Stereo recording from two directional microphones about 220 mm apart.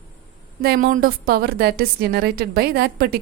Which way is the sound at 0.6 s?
40° right (ahead or behind).